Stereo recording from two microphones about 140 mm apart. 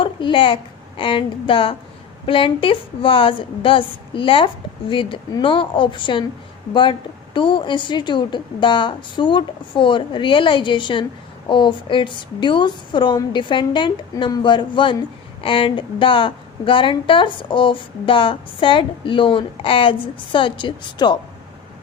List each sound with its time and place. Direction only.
0.0 s a woman's voice: 35° left (ahead or behind)
7.3 s a woman's voice: 35° left (ahead or behind)